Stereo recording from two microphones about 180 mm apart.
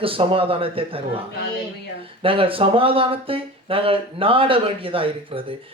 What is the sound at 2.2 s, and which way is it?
Speech, 30° right (ahead or behind).